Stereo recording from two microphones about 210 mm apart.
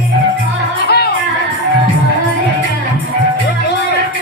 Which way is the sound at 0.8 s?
50° left (ahead or behind).